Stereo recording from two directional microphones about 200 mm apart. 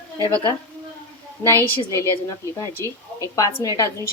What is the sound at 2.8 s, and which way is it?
A woman's voice, 15° left (ahead or behind).